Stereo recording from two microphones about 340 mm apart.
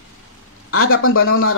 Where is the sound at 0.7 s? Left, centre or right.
Left.